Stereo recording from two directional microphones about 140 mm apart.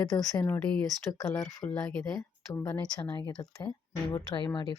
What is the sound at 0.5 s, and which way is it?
Speech, 10° left (ahead or behind).